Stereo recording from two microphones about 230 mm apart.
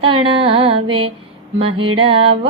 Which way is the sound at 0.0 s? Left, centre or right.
Right.